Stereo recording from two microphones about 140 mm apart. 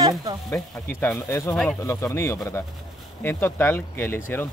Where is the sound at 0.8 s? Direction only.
15° left (ahead or behind).